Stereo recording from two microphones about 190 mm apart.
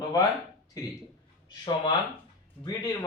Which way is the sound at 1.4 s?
25° left (ahead or behind).